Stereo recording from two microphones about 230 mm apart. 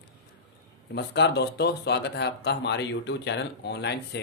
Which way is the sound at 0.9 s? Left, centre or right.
Left.